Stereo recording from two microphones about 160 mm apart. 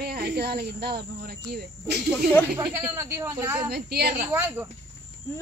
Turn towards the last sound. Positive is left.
turn(degrees=-15)  # may be behind; listen again after turning